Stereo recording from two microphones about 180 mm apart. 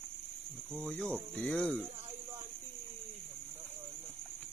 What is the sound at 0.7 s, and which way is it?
Speech, centre (ahead or behind).